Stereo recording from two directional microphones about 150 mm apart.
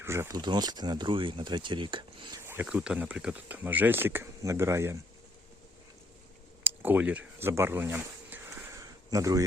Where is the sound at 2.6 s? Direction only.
5° right (ahead or behind).